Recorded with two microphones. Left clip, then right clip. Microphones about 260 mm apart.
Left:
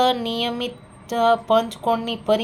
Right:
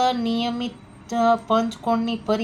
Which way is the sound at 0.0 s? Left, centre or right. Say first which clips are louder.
Left 2 dB; left.